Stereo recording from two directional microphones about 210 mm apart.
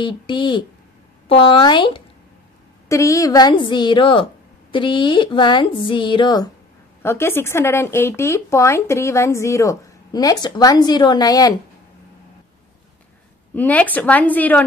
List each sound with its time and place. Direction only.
0.0 s speech: 25° left (ahead or behind)
13.6 s speech: 5° left (ahead or behind)